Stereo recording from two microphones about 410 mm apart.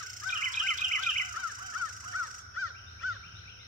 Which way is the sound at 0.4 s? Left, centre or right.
Centre.